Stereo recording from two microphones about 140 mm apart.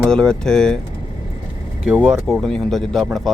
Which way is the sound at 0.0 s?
5° left (ahead or behind).